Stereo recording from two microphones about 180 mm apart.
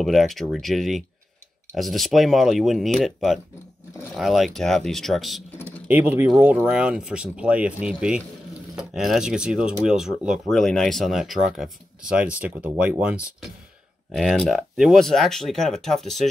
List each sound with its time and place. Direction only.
0.0 s speech: centre (ahead or behind)